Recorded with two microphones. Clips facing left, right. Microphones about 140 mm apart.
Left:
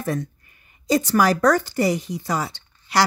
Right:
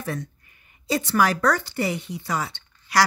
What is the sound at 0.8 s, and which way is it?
Speech, 40° left (ahead or behind).